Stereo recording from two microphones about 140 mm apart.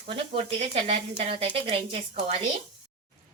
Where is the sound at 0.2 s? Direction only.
45° right (ahead or behind).